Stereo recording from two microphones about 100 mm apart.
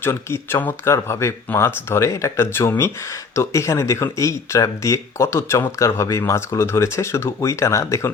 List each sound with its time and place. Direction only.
0.0 s speech: 25° left (ahead or behind)